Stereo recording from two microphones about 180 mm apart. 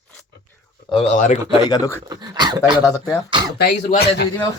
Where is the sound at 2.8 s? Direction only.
20° left (ahead or behind).